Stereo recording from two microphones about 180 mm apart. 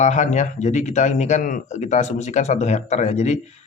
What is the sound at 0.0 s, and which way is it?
Speech, 40° left (ahead or behind).